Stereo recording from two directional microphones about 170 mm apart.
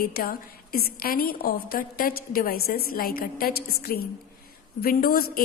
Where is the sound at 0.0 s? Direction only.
60° left (ahead or behind).